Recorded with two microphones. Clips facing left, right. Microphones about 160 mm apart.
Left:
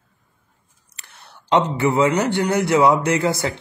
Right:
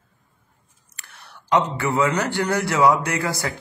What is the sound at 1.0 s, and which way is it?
Speech, 25° left (ahead or behind).